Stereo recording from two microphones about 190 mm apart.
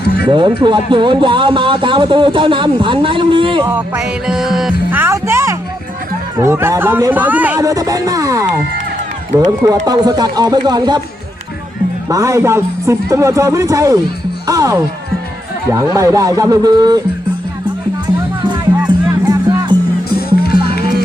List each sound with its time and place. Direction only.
0.3 s speech: 25° right (ahead or behind)
3.7 s speech: 10° right (ahead or behind)
12.0 s speech: 15° right (ahead or behind)
14.4 s music: 15° right (ahead or behind)
15.7 s speech: 15° right (ahead or behind)
19.3 s music: 20° right (ahead or behind)